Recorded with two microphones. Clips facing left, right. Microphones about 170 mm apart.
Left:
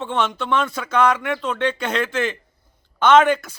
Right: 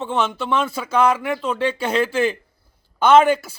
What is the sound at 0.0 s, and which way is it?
A man's voice, 5° right (ahead or behind).